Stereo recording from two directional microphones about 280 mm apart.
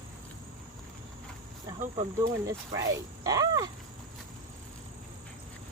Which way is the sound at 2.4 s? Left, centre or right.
Centre.